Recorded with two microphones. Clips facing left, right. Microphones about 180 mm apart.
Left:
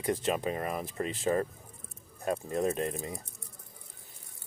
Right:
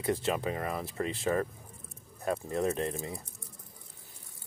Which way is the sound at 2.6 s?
20° left (ahead or behind).